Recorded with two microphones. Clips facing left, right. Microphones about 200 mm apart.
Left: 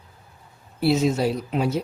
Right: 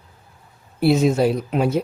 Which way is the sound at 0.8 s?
55° right (ahead or behind).